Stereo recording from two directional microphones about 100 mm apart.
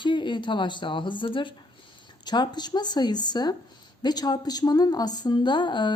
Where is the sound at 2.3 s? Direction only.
45° left (ahead or behind).